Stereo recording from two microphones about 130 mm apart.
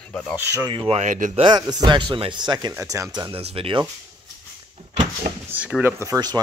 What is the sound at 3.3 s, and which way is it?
Speech, 50° right (ahead or behind).